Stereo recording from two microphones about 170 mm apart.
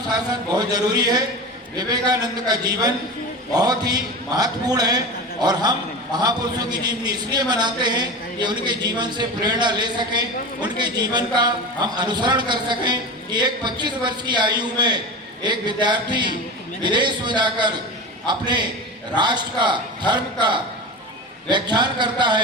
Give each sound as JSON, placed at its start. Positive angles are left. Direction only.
{"t": 0.1, "sound": "a man's voice", "side_deg": -25}